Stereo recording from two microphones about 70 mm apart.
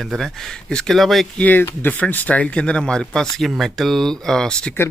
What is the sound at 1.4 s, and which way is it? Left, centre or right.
Speech, left.